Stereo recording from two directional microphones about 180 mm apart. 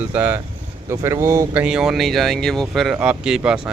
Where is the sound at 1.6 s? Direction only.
5° right (ahead or behind).